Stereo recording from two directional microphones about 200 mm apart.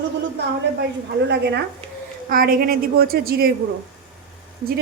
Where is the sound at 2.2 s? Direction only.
45° right (ahead or behind).